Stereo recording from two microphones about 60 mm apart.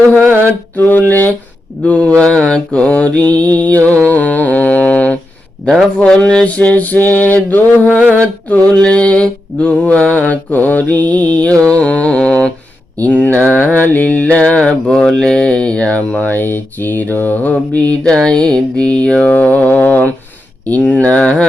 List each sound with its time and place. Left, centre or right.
0.2 s mantra: right
0.8 s a sound: left
1.8 s mantra: left
4.1 s humming: left
6.0 s mantra: centre